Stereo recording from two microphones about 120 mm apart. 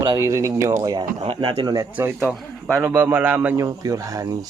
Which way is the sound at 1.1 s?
50° right (ahead or behind).